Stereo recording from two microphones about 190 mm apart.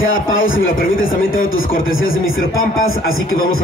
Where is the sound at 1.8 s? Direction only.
90° left.